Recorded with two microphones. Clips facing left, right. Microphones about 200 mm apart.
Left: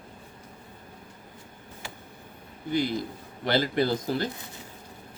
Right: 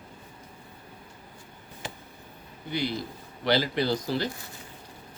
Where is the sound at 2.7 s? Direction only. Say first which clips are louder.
Left 3 dB; 45° left (ahead or behind).